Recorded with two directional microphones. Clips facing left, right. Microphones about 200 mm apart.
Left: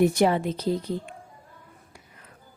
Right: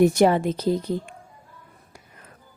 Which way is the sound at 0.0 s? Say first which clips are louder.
Right 3 dB; 45° right (ahead or behind).